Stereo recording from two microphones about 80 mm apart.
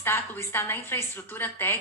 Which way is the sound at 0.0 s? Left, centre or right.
Left.